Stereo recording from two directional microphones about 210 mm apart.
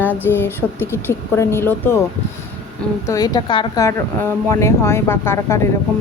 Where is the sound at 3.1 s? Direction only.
15° left (ahead or behind).